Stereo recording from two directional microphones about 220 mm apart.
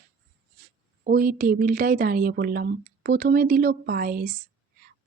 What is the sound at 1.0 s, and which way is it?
Speech, 40° right (ahead or behind).